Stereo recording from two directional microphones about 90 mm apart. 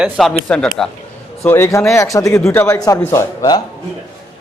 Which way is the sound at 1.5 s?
30° left (ahead or behind).